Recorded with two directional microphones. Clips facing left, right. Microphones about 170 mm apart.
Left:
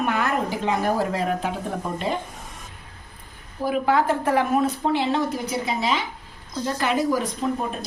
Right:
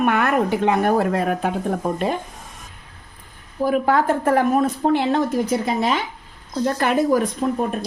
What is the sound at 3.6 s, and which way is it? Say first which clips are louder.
Speech: right 3 dB; 50° right (ahead or behind).